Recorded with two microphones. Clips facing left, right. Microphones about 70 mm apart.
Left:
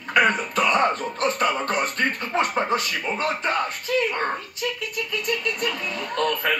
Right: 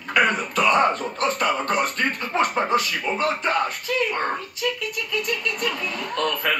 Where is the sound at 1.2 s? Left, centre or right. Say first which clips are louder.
Even; left.